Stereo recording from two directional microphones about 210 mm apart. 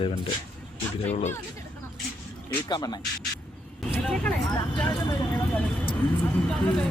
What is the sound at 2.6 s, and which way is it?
Speech, 20° left (ahead or behind).